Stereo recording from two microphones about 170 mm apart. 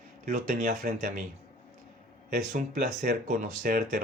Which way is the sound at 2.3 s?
50° right (ahead or behind).